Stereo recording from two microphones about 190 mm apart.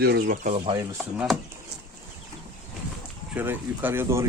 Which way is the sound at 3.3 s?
10° right (ahead or behind).